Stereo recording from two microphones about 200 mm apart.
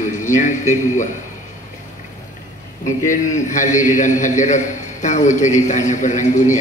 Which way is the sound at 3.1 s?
40° left (ahead or behind).